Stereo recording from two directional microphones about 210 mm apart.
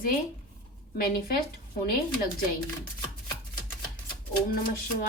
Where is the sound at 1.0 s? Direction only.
45° left (ahead or behind).